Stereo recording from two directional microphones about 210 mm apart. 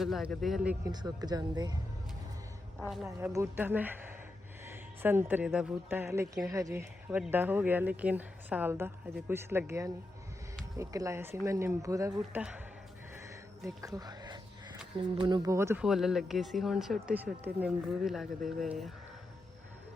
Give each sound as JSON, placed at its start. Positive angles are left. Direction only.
{"t": 0.0, "sound": "speech", "side_deg": 0}
{"t": 0.9, "sound": "speech", "side_deg": -20}
{"t": 3.1, "sound": "speech", "side_deg": -10}
{"t": 13.7, "sound": "speech", "side_deg": -15}